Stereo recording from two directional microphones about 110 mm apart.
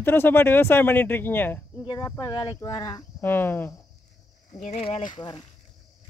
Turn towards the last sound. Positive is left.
turn(degrees=40)  # may be behind; listen again after turning